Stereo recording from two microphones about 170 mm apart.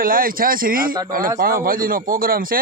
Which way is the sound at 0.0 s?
55° right (ahead or behind).